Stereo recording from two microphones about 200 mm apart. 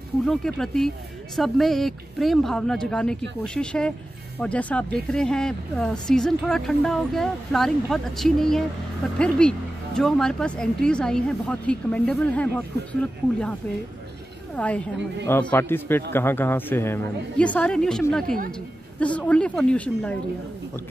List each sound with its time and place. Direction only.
0.2 s a woman's voice: centre (ahead or behind)
18.2 s speech: 45° right (ahead or behind)
18.9 s speech: 5° left (ahead or behind)